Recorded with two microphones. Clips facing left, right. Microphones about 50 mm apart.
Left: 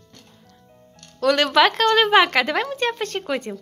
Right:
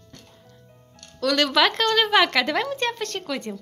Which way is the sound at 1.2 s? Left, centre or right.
Left.